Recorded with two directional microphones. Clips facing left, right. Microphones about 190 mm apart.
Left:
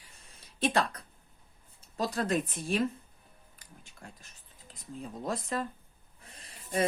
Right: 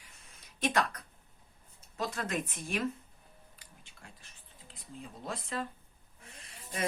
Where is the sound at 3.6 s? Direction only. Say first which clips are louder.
Left 8 dB; 45° left (ahead or behind).